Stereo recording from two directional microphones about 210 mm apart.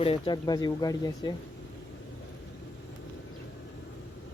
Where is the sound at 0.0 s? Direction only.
25° left (ahead or behind).